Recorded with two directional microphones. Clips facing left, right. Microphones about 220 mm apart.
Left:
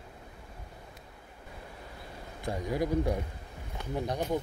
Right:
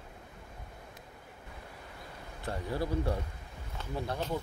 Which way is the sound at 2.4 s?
15° left (ahead or behind).